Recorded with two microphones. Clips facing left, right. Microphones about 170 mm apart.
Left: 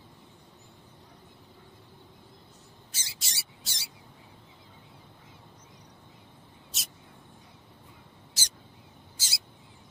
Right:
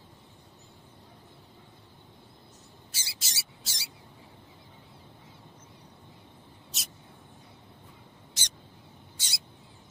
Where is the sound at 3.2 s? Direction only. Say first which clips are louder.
Even; centre (ahead or behind).